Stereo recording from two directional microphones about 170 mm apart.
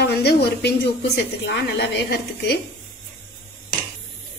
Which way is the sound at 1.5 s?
90° left.